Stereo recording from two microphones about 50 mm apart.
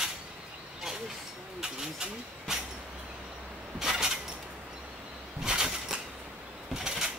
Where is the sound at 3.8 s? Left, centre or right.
Centre.